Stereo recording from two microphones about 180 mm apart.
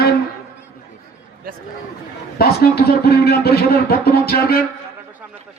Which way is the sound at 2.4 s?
60° left (ahead or behind).